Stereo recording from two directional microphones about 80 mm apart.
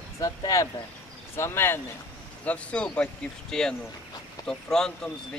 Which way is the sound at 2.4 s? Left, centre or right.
Centre.